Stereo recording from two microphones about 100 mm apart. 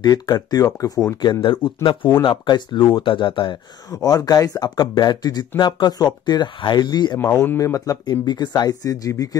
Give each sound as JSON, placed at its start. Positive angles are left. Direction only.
{"t": 0.0, "sound": "speech", "side_deg": 40}
{"t": 3.9, "sound": "speech", "side_deg": 35}
{"t": 7.2, "sound": "speech", "side_deg": 20}